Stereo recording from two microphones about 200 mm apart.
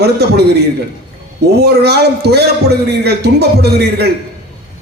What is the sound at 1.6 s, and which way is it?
A man's voice, 55° right (ahead or behind).